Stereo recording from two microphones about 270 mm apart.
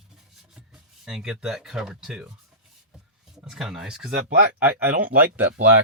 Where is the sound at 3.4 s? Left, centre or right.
Centre.